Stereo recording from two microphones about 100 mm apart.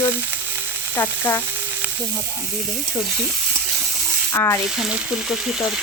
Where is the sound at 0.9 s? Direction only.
25° left (ahead or behind).